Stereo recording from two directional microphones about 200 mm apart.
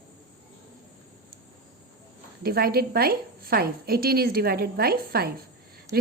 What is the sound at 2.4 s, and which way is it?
A woman's voice, 50° right (ahead or behind).